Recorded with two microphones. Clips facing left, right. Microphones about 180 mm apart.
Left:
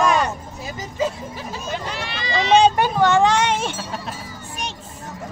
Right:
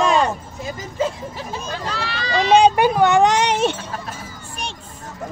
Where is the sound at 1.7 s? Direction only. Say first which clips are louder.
Even; 20° left (ahead or behind).